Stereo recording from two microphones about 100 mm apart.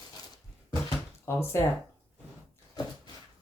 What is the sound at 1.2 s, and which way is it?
Speech, 25° left (ahead or behind).